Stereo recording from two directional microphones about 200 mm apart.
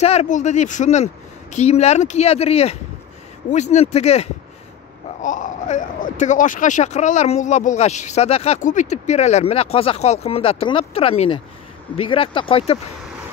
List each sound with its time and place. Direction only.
0.0 s speech: 30° left (ahead or behind)